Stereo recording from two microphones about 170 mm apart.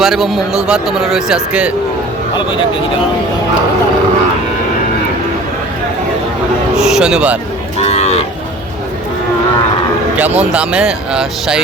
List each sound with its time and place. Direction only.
0.0 s a man's voice: centre (ahead or behind)
6.7 s music: 5° right (ahead or behind)
7.8 s cattle: 40° left (ahead or behind)
10.2 s speech: 10° right (ahead or behind)